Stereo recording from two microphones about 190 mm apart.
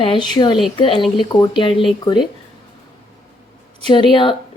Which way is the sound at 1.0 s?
Centre (ahead or behind).